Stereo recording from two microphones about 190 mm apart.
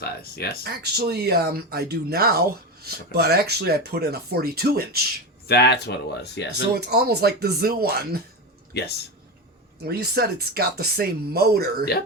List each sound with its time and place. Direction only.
0.0 s speech: 55° left (ahead or behind)
0.6 s speech: 55° right (ahead or behind)
5.5 s speech: 60° left (ahead or behind)
6.7 s speech: 55° right (ahead or behind)
8.7 s speech: 60° left (ahead or behind)
9.8 s speech: 55° right (ahead or behind)